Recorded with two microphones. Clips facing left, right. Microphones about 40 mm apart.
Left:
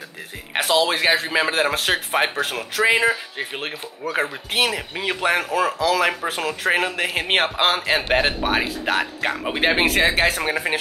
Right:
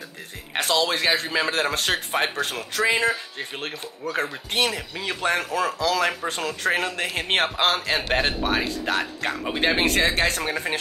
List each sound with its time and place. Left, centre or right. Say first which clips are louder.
0.5 s speech: left 3 dB; centre